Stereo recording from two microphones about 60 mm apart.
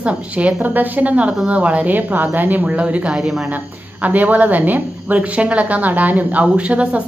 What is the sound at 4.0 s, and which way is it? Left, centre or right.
A woman's voice, right.